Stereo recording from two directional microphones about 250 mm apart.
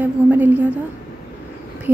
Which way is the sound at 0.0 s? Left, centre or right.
Centre.